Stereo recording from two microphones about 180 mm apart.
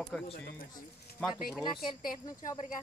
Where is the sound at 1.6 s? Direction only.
25° left (ahead or behind).